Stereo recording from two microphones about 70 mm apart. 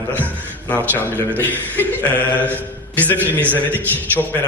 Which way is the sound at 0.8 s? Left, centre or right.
Right.